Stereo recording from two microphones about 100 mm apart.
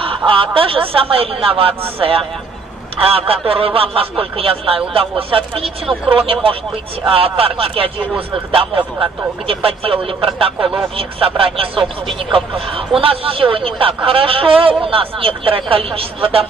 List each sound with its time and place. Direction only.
0.3 s a man's voice: 65° right (ahead or behind)